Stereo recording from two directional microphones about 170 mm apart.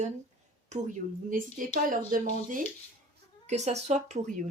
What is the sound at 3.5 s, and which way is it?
Speech, 40° right (ahead or behind).